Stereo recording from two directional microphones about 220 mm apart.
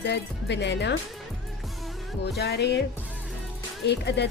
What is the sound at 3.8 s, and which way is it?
Music, 50° left (ahead or behind).